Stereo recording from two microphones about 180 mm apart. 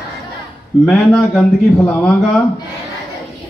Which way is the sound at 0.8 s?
Centre (ahead or behind).